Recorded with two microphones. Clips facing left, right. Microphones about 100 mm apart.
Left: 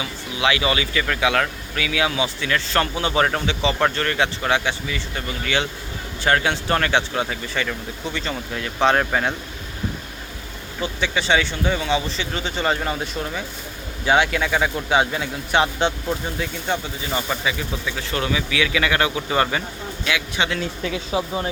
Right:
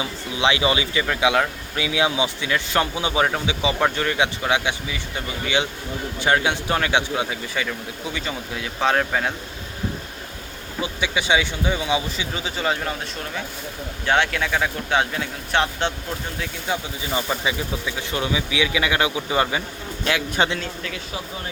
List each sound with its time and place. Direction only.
0.0 s speech: 25° right (ahead or behind); by 9.3 s centre (ahead or behind)
10.8 s a man's voice: 10° right (ahead or behind)
20.1 s speech: 40° right (ahead or behind)
20.8 s speech: 20° left (ahead or behind)